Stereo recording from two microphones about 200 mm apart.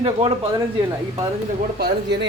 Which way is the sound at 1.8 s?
55° right (ahead or behind).